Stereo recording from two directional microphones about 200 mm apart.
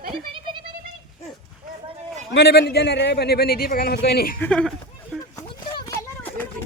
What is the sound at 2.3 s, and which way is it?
A man's voice, 55° left (ahead or behind).